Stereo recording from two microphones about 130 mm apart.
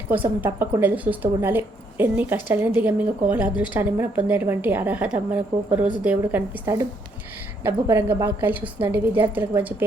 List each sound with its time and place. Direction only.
0.1 s a woman's voice: 15° right (ahead or behind)